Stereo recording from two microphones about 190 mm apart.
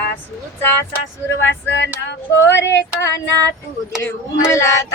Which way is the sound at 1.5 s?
70° left (ahead or behind).